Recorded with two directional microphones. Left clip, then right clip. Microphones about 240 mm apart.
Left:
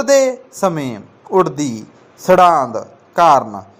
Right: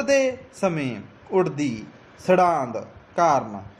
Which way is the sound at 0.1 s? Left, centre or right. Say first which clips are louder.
Left 8 dB; centre.